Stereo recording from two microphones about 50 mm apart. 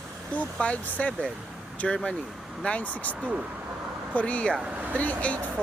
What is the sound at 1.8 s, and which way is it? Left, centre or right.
Speech, centre.